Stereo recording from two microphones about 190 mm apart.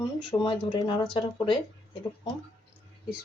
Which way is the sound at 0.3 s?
25° left (ahead or behind).